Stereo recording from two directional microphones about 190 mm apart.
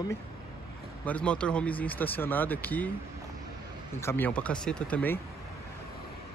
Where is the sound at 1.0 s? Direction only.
5° left (ahead or behind).